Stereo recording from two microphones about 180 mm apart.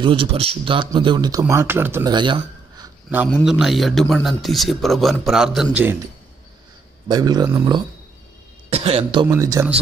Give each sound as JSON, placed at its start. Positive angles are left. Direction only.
{"t": 0.0, "sound": "a man's voice", "side_deg": -30}
{"t": 2.1, "sound": "a sound", "side_deg": -25}
{"t": 3.4, "sound": "speech", "side_deg": 0}
{"t": 7.1, "sound": "a man's voice", "side_deg": -20}
{"t": 8.6, "sound": "speech", "side_deg": -35}
{"t": 9.3, "sound": "speech", "side_deg": -15}